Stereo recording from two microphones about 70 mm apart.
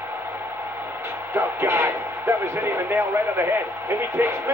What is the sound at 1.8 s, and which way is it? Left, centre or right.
Speech, right.